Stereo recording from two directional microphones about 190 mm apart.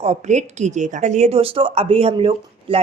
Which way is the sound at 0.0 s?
35° right (ahead or behind).